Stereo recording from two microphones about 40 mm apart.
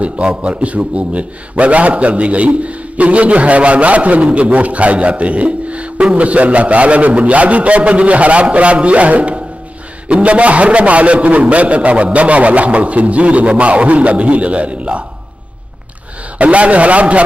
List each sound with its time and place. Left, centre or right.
0.0 s a man's voice: right
16.3 s a man's voice: right